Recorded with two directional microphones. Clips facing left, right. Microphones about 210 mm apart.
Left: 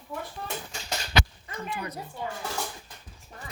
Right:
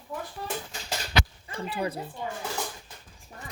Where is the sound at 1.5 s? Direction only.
30° right (ahead or behind).